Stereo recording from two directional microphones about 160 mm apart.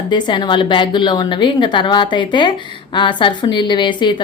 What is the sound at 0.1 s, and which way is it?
A woman's voice, 30° left (ahead or behind).